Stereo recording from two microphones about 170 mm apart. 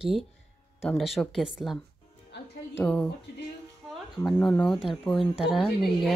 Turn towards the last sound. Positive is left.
turn(degrees=0)  # may be behind; listen again after turning